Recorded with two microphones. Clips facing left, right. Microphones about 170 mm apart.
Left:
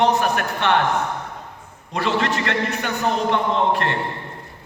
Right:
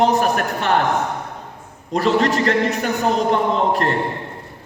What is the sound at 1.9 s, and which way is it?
A man's voice, 40° right (ahead or behind).